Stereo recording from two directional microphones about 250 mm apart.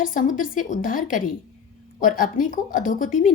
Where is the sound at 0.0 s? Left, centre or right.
Left.